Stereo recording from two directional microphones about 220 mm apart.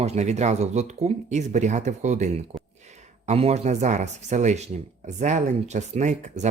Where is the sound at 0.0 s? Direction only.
30° right (ahead or behind).